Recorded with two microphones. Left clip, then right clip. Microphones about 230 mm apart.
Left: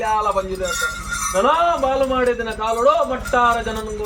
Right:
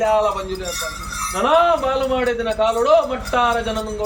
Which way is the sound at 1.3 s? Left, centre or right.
Right.